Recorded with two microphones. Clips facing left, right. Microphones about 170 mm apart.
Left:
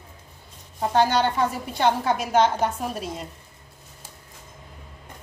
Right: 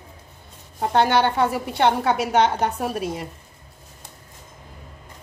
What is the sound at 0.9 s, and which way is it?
A woman's voice, 65° right (ahead or behind).